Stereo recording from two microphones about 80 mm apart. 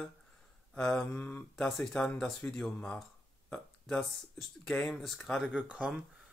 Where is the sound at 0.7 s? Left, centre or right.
Centre.